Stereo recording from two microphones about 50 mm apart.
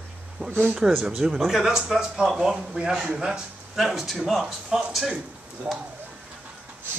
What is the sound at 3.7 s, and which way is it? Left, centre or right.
Speech, centre.